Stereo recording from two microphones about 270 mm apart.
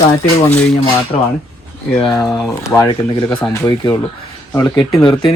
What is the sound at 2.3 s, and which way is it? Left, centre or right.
Speech, centre.